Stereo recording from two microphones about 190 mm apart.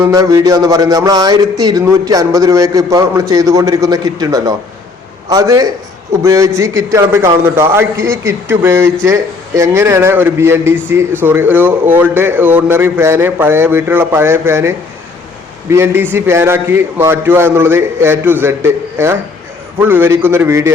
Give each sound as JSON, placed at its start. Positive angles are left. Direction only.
{"t": 0.0, "sound": "a sound", "side_deg": -15}
{"t": 6.2, "sound": "a man's voice", "side_deg": -15}
{"t": 15.7, "sound": "a man's voice", "side_deg": -15}